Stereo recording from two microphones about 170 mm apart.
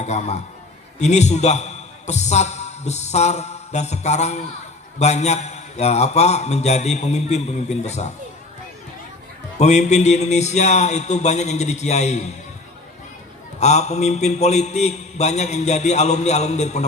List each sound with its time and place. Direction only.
0.0 s a man's voice: 40° left (ahead or behind)
9.6 s speech: 40° left (ahead or behind)
13.6 s a man's voice: 40° left (ahead or behind)